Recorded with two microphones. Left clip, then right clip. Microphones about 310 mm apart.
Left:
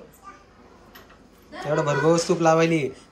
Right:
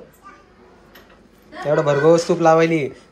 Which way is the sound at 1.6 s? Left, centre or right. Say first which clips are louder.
Right 6 dB; centre.